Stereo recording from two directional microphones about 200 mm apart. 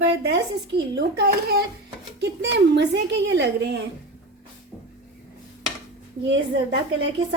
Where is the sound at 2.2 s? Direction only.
60° right (ahead or behind).